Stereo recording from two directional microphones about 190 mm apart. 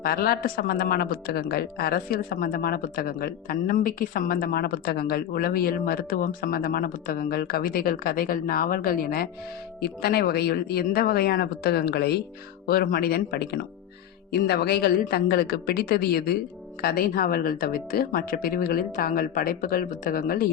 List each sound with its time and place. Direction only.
0.0 s a woman's voice: 50° left (ahead or behind)